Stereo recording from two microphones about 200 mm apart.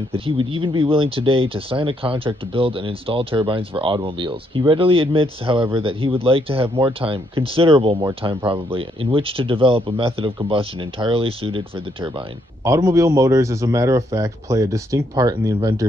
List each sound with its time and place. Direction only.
0.1 s speech: 25° right (ahead or behind)